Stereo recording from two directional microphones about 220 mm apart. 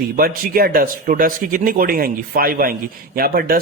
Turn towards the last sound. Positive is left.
turn(degrees=-40)  # may be behind; listen again after turning